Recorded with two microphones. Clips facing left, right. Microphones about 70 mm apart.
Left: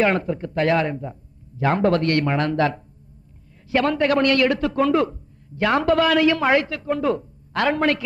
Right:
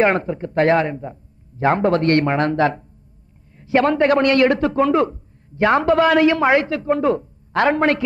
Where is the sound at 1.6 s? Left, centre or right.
Right.